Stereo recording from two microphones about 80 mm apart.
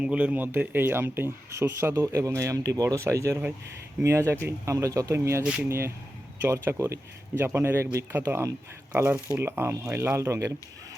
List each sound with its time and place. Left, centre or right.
0.0 s speech: centre; by 5.4 s right
5.4 s speech: centre
5.6 s speech: right